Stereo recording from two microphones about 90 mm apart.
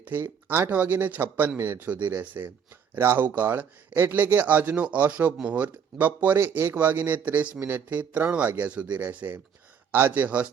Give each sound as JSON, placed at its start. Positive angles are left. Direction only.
{"t": 0.0, "sound": "speech", "side_deg": -20}